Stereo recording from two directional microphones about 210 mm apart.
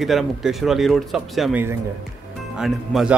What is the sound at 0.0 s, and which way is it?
Speech, centre (ahead or behind).